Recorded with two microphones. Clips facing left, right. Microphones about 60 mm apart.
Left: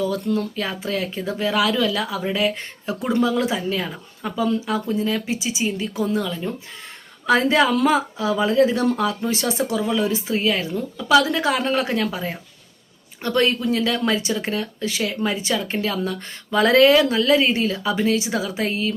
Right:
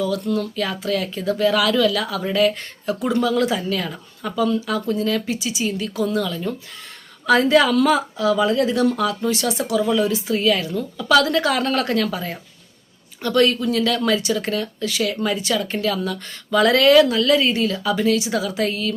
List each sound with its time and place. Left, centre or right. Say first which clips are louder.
0.0 s speech: even; left